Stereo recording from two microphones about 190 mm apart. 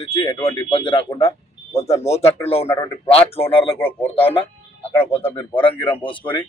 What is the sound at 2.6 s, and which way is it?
Speech, 15° left (ahead or behind).